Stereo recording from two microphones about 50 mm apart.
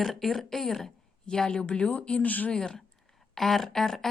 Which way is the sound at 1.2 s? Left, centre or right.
Centre.